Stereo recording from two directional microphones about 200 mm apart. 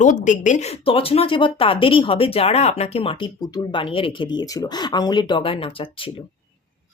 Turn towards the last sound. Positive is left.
turn(degrees=25)  # may be behind; listen again after turning